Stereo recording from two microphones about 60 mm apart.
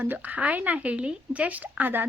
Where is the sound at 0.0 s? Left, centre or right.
Right.